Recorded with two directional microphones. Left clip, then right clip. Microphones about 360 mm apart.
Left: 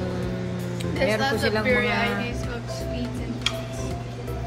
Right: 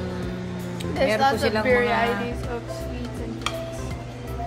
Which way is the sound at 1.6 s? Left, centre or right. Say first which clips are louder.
Right 4 dB; right.